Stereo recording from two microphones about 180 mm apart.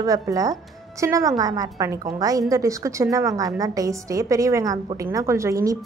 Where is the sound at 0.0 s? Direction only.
20° right (ahead or behind).